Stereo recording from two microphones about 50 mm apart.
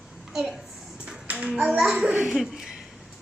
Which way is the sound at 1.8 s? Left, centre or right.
Centre.